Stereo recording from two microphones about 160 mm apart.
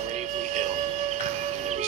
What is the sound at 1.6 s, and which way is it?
Music, 45° right (ahead or behind).